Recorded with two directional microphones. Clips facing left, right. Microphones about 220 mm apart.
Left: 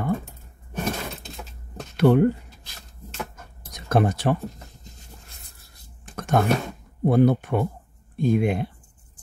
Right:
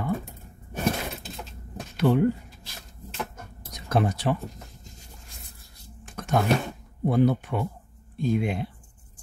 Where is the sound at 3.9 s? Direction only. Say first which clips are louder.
Left 3 dB; 50° left (ahead or behind).